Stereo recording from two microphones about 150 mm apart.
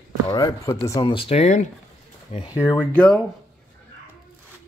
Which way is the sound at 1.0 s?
35° left (ahead or behind).